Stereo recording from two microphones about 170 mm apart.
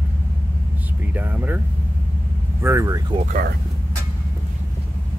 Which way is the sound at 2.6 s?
20° right (ahead or behind).